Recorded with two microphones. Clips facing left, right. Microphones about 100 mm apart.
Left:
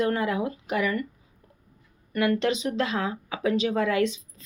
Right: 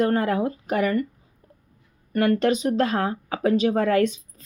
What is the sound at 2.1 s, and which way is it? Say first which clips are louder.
Speech: right 4 dB; 40° right (ahead or behind).